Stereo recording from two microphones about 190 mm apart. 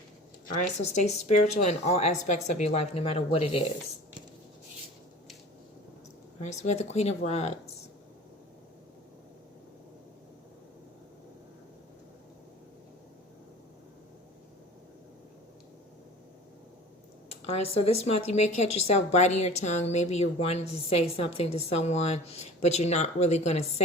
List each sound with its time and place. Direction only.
0.4 s a woman's voice: 40° left (ahead or behind)
6.4 s a woman's voice: 35° left (ahead or behind)
17.2 s a woman's voice: 30° left (ahead or behind)